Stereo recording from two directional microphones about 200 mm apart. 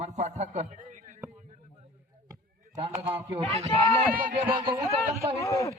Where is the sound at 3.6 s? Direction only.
30° right (ahead or behind).